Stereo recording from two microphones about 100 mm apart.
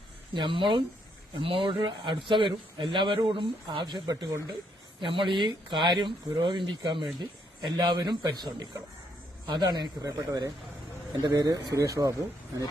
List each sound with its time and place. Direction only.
0.3 s speech: 55° right (ahead or behind)
4.9 s speech: 55° right (ahead or behind); by 12.1 s 35° right (ahead or behind)